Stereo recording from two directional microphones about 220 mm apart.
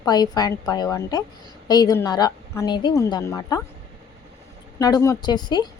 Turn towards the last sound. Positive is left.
turn(degrees=20)  # may be behind; listen again after turning